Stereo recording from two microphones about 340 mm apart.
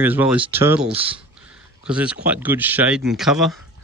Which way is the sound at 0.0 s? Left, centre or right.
Centre.